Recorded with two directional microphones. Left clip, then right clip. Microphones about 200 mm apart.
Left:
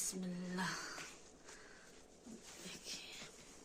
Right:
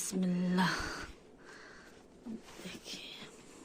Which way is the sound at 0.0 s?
45° right (ahead or behind).